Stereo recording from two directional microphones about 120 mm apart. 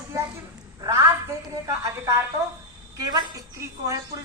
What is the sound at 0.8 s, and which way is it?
A woman's voice, 25° right (ahead or behind).